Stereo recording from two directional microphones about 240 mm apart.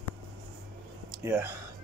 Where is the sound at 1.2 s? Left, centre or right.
Centre.